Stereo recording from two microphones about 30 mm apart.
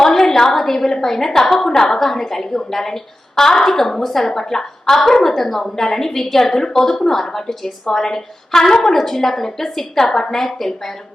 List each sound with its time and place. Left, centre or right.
0.0 s a sound: centre
0.5 s a woman's voice: centre
4.3 s a woman's voice: centre